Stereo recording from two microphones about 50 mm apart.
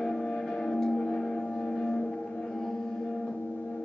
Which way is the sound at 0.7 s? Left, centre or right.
Centre.